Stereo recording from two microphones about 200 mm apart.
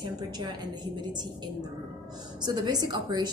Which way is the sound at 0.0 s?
20° right (ahead or behind).